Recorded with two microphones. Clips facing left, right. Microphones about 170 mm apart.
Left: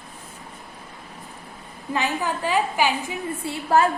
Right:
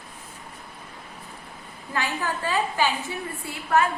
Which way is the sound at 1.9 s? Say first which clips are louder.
Left 3 dB; 20° left (ahead or behind).